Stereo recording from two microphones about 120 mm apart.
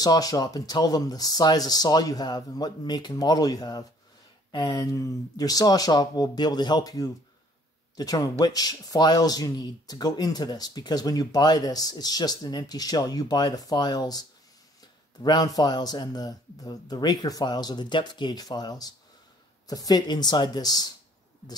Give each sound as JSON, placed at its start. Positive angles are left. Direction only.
{"t": 0.0, "sound": "speech", "side_deg": 30}
{"t": 15.2, "sound": "speech", "side_deg": 35}